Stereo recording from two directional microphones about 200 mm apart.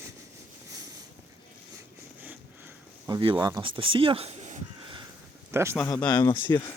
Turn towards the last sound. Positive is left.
turn(degrees=20)  # may be behind; listen again after turning